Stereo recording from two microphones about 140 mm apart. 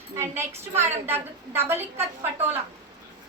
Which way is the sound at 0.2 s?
15° right (ahead or behind).